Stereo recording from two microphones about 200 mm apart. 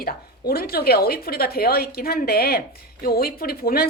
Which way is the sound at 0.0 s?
50° left (ahead or behind).